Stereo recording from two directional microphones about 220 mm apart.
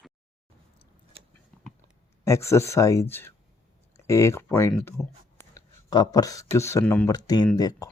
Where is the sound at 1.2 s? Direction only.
25° right (ahead or behind).